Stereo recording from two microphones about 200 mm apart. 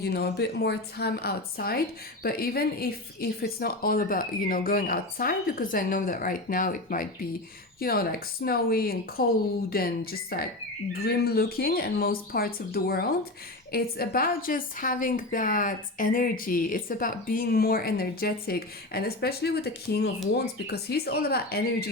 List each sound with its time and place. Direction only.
0.0 s speech: 55° left (ahead or behind)